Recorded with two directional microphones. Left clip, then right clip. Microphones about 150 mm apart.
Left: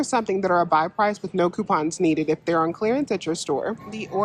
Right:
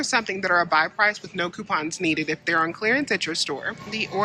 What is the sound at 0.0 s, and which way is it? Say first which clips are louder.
Speech: left 1 dB; 25° left (ahead or behind).